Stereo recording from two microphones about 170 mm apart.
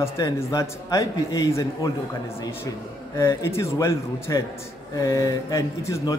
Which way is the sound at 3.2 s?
15° left (ahead or behind).